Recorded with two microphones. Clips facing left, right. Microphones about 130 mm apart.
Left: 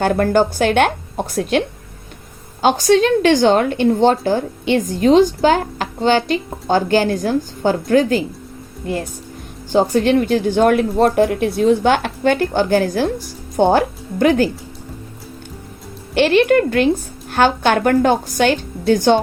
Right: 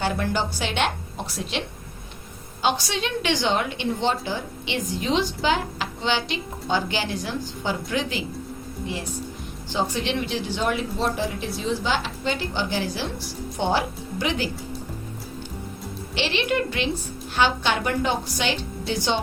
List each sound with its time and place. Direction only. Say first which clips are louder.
0.0 s a woman's voice: left 10 dB; 50° left (ahead or behind)
16.1 s a woman's voice: left 12 dB; 50° left (ahead or behind)